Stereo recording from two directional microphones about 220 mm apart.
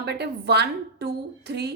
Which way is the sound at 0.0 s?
50° right (ahead or behind).